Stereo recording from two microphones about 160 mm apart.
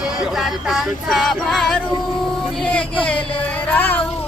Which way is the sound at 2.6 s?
5° left (ahead or behind).